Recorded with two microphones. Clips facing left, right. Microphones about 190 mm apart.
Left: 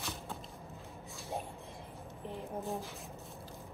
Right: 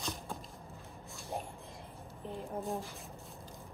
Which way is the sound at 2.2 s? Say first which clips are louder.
Right 1 dB; centre (ahead or behind).